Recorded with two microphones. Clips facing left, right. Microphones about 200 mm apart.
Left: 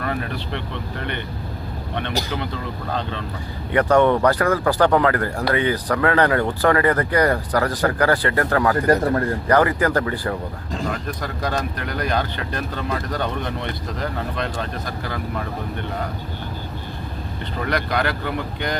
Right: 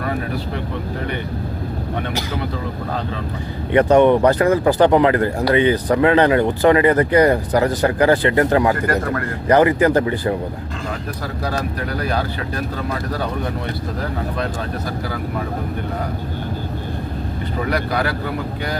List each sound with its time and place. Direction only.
3.7 s speech: 20° right (ahead or behind)
11.4 s speech: 5° right (ahead or behind)
17.7 s speech: 5° right (ahead or behind)